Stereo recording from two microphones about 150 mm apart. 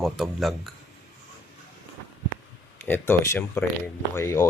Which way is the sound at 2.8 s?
15° left (ahead or behind).